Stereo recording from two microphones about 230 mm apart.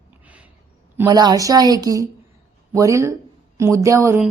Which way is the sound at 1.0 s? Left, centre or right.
Centre.